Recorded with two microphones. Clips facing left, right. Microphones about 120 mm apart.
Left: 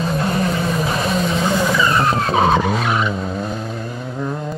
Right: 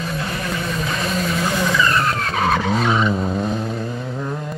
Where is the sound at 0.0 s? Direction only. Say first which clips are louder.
Left 6 dB; 35° left (ahead or behind).